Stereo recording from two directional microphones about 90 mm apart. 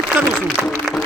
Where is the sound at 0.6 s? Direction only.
20° right (ahead or behind).